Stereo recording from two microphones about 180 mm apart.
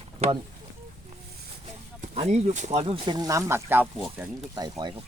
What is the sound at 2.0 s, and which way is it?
Speech, 35° right (ahead or behind).